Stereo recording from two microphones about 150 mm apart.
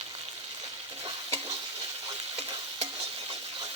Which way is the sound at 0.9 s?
35° right (ahead or behind).